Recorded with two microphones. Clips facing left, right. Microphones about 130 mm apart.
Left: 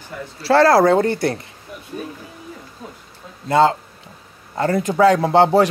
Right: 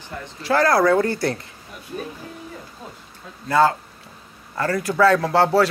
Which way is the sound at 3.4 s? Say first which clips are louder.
Left 2 dB; 25° left (ahead or behind).